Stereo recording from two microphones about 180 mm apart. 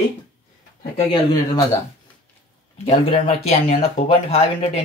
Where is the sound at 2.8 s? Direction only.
35° left (ahead or behind).